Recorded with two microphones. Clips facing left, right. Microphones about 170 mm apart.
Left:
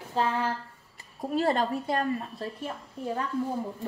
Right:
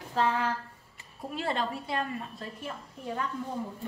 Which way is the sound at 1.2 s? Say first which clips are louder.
Left 6 dB; 40° left (ahead or behind).